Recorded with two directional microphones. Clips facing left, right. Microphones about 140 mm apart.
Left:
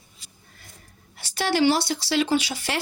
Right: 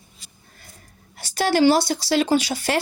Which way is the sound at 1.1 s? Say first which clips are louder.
Right 4 dB; 45° right (ahead or behind).